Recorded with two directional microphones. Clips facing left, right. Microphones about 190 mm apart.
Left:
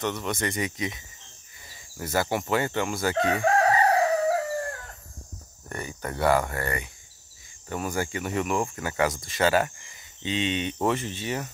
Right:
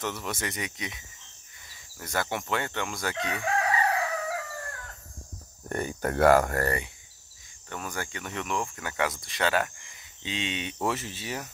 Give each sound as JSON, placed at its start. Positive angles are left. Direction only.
{"t": 0.0, "sound": "speech", "side_deg": -5}
{"t": 3.2, "sound": "chicken", "side_deg": 50}
{"t": 5.7, "sound": "speech", "side_deg": -45}
{"t": 7.7, "sound": "speech", "side_deg": 10}